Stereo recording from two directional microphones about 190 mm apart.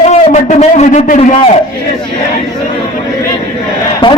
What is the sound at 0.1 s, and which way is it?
A man's voice, 35° left (ahead or behind).